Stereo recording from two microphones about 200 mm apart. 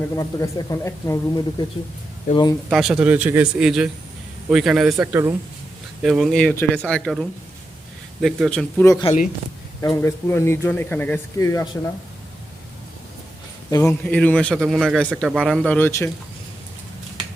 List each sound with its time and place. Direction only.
0.2 s speech: 15° left (ahead or behind)
2.6 s speech: centre (ahead or behind); by 9.0 s 15° left (ahead or behind)
9.0 s speech: 40° left (ahead or behind)
9.8 s speech: 15° left (ahead or behind)
13.8 s speech: 5° left (ahead or behind)